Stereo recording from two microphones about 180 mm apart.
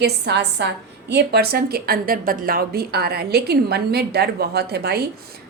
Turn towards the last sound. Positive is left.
turn(degrees=-65)  # may be behind; listen again after turning